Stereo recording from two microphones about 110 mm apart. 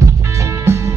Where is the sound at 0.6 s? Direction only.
25° right (ahead or behind).